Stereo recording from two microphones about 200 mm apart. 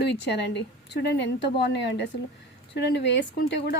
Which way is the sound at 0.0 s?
60° left (ahead or behind).